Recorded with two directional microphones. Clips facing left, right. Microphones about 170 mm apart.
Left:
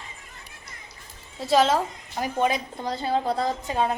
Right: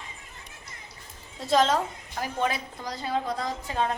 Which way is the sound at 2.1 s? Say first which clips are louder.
Left 4 dB; 20° left (ahead or behind).